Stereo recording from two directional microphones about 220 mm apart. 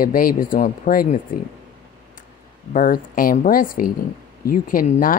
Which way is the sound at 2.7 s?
40° left (ahead or behind).